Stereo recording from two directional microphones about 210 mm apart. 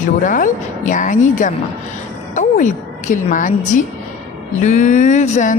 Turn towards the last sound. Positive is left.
turn(degrees=35)  # may be behind; listen again after turning